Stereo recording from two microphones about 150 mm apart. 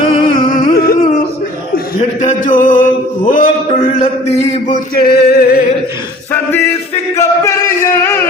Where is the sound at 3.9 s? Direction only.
40° left (ahead or behind).